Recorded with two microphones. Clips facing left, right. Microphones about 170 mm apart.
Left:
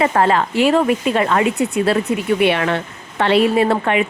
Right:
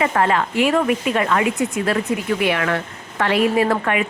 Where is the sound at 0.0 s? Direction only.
35° left (ahead or behind).